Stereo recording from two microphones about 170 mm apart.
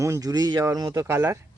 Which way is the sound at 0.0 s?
20° right (ahead or behind).